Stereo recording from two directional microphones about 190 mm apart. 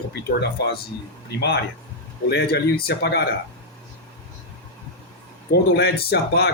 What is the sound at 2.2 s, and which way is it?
Speech, 55° left (ahead or behind).